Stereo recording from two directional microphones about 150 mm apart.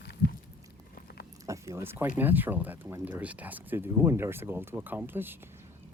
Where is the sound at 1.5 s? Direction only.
20° right (ahead or behind).